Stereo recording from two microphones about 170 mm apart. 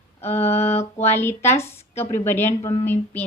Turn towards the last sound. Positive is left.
turn(degrees=15)  # may be behind; listen again after turning